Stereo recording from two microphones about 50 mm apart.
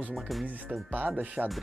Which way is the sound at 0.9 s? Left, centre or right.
Right.